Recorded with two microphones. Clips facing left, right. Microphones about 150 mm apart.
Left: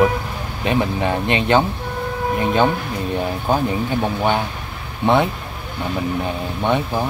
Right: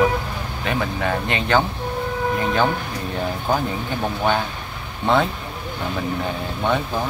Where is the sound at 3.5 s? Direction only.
15° left (ahead or behind).